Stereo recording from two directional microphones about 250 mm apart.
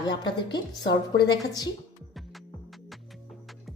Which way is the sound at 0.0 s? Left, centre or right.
Centre.